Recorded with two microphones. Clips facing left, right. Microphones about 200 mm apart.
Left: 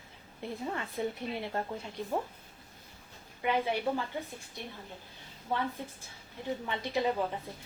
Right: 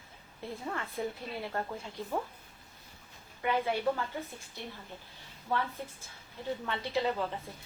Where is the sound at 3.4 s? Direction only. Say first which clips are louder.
Even; 15° left (ahead or behind).